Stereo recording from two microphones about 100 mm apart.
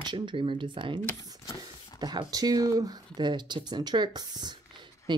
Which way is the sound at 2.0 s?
45° right (ahead or behind).